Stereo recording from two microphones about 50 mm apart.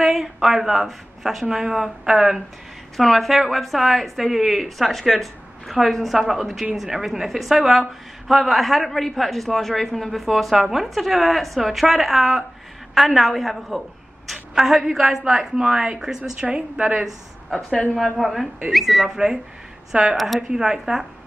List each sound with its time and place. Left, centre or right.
0.0 s a woman's voice: centre
17.5 s a woman's voice: centre